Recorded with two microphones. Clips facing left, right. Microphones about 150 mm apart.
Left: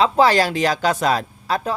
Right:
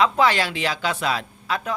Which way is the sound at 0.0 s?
35° left (ahead or behind).